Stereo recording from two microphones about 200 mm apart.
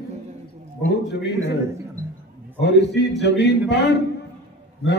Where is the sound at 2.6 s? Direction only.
60° left (ahead or behind).